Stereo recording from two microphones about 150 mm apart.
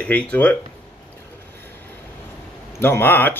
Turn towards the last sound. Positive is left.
turn(degrees=15)  # may be behind; listen again after turning